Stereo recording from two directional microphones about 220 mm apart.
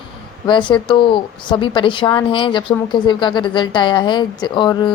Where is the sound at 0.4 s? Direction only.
20° left (ahead or behind).